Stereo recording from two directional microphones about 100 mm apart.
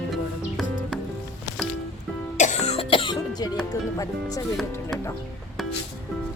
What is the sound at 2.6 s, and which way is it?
Cough, 70° left (ahead or behind).